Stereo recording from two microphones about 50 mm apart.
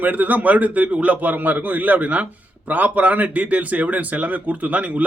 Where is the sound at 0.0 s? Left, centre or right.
Right.